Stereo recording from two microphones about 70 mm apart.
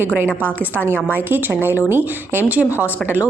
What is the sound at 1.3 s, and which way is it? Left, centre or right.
A woman's voice, right.